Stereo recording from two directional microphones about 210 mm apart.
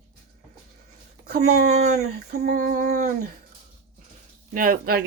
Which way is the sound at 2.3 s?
45° right (ahead or behind).